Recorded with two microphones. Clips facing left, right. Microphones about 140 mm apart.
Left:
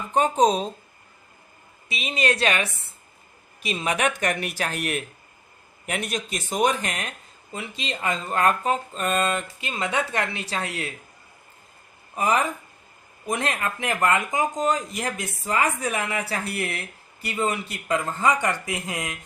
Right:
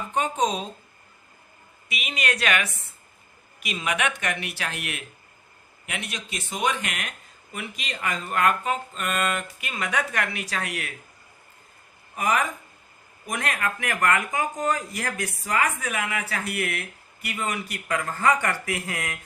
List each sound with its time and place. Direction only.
0.1 s speech: 35° left (ahead or behind)
1.9 s speech: 30° left (ahead or behind)
12.1 s speech: 30° left (ahead or behind)